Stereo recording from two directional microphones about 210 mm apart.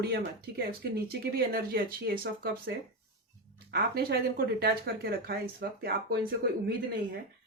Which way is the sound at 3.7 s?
50° right (ahead or behind).